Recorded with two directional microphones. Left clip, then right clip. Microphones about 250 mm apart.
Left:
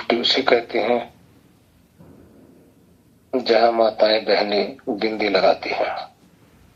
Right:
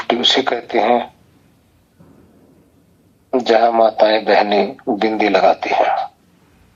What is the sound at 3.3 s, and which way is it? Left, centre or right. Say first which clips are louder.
Speech: right 4 dB; right.